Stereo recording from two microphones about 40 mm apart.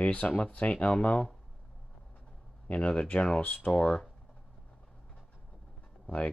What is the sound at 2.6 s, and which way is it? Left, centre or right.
Speech, left.